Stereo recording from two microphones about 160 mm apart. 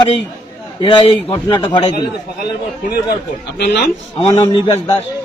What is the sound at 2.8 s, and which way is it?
Speech, 75° left (ahead or behind).